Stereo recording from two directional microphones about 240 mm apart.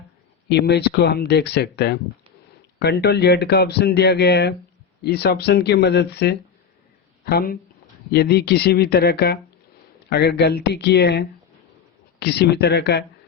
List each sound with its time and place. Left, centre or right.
0.4 s speech: left